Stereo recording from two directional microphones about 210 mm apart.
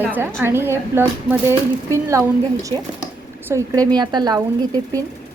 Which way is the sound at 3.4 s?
15° right (ahead or behind).